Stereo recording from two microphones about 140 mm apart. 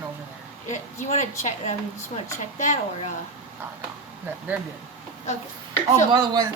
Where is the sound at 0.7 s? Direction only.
60° left (ahead or behind).